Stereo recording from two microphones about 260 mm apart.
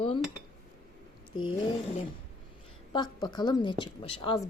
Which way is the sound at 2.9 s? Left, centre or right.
Centre.